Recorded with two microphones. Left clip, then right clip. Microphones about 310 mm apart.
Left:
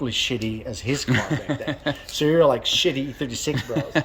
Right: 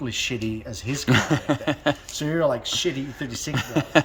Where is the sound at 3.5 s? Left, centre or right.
Centre.